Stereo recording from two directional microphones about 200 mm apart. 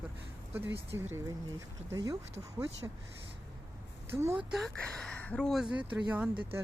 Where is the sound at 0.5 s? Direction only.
10° right (ahead or behind).